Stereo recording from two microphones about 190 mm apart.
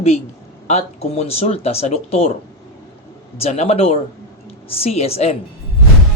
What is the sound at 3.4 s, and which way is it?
Speech, 35° left (ahead or behind).